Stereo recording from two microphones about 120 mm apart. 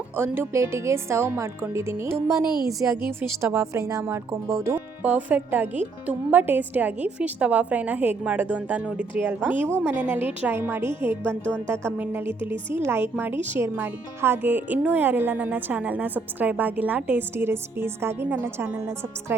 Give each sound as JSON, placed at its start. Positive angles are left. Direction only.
{"t": 0.2, "sound": "a woman's voice", "side_deg": -20}
{"t": 5.0, "sound": "speech", "side_deg": -15}
{"t": 11.4, "sound": "speech", "side_deg": 10}
{"t": 11.7, "sound": "a woman's voice", "side_deg": -20}